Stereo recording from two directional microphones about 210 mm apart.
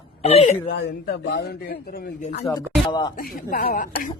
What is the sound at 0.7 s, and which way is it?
A man's voice, 50° left (ahead or behind).